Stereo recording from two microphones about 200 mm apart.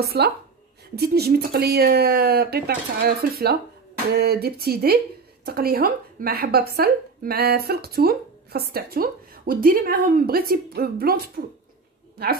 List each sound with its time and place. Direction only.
0.0 s a woman's voice: 50° right (ahead or behind)